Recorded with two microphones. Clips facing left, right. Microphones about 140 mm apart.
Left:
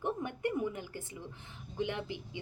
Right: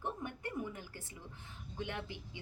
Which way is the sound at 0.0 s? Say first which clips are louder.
Left 7 dB; 15° left (ahead or behind).